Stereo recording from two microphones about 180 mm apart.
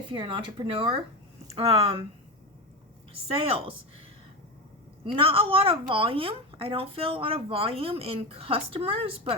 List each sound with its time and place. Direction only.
0.1 s a woman's voice: 30° right (ahead or behind)
3.1 s a woman's voice: 30° right (ahead or behind)
5.1 s a woman's voice: 30° right (ahead or behind)